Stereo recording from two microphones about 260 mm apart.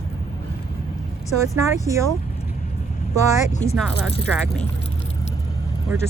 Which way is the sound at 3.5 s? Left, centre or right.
Left.